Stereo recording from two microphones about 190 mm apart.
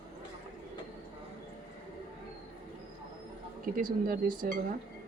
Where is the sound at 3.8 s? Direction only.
45° right (ahead or behind).